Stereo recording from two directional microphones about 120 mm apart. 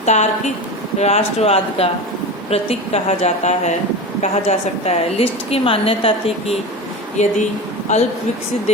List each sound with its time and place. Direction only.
0.0 s a woman's voice: 75° left (ahead or behind); by 6.3 s 50° left (ahead or behind)
7.2 s speech: 80° left